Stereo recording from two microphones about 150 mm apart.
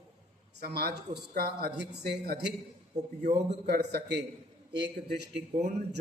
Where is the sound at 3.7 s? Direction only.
90° right.